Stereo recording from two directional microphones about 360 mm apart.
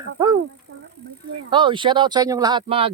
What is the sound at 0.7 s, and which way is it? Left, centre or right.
Bicycle, right.